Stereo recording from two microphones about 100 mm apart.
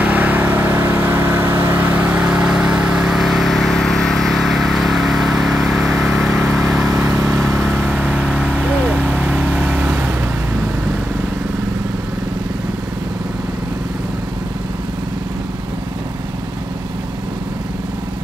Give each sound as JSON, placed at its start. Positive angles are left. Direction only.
{"t": 0.0, "sound": "vehicle", "side_deg": -15}
{"t": 6.9, "sound": "vehicle", "side_deg": -30}
{"t": 7.8, "sound": "vehicle", "side_deg": -15}